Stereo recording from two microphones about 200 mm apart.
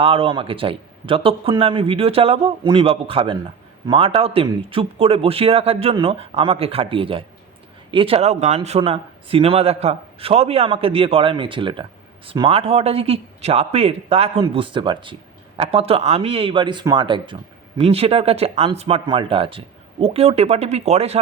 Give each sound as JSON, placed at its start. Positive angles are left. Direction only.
{"t": 0.0, "sound": "speech", "side_deg": -30}